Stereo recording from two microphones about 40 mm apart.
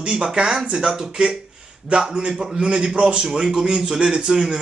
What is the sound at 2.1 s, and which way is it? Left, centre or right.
Speech, right.